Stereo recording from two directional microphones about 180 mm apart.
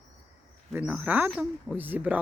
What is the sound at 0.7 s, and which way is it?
Speech, 10° right (ahead or behind).